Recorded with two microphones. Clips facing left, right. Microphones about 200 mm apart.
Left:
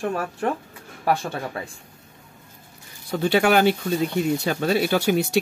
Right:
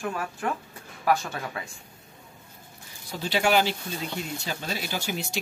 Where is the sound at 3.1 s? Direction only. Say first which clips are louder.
Left 6 dB; 55° left (ahead or behind).